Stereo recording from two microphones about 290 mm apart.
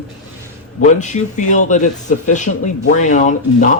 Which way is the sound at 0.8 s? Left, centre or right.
Left.